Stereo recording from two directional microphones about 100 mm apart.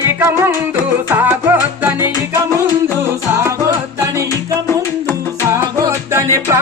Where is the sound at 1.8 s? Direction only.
20° right (ahead or behind).